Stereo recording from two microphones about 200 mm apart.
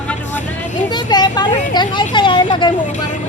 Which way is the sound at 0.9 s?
20° left (ahead or behind).